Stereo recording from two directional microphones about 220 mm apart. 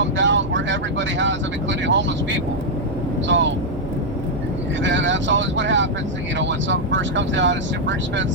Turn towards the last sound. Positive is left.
turn(degrees=-55)  # may be behind; listen again after turning